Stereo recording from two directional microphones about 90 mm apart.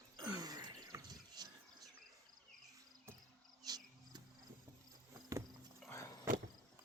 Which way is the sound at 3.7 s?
45° right (ahead or behind).